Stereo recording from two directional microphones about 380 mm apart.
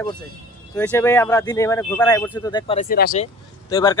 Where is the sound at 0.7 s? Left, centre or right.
Centre.